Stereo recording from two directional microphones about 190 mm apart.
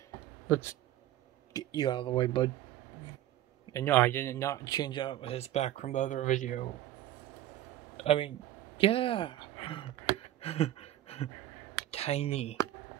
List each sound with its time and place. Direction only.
0.5 s speech: 15° left (ahead or behind)
3.7 s speech: 10° left (ahead or behind); by 6.6 s 40° left (ahead or behind)
8.0 s speech: 30° left (ahead or behind)
10.4 s a sound: 30° left (ahead or behind)
11.9 s speech: 35° left (ahead or behind)